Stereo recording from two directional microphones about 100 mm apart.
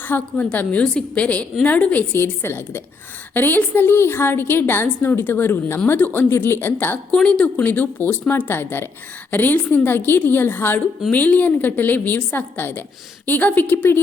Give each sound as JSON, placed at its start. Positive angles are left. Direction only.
{"t": 0.0, "sound": "a woman's voice", "side_deg": 20}
{"t": 7.2, "sound": "a woman's voice", "side_deg": 10}